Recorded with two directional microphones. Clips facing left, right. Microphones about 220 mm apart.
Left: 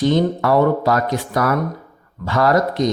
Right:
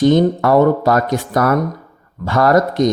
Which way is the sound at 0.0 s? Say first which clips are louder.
Right 4 dB; 50° right (ahead or behind).